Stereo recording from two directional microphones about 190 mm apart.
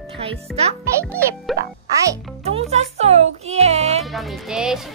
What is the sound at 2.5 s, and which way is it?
Music, 35° right (ahead or behind).